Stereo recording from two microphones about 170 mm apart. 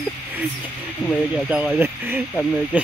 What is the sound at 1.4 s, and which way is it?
Speech, 5° right (ahead or behind).